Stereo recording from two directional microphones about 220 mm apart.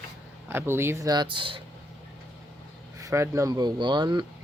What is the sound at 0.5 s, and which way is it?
Speech, 10° right (ahead or behind).